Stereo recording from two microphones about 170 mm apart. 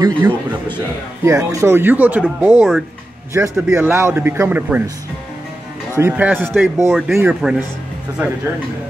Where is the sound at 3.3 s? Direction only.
15° right (ahead or behind).